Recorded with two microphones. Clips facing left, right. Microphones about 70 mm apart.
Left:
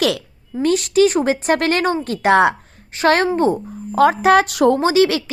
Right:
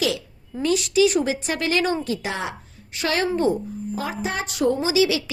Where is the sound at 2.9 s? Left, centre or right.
Left.